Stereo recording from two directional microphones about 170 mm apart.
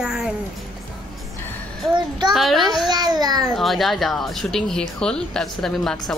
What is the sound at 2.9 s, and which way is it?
Babbling, 25° right (ahead or behind).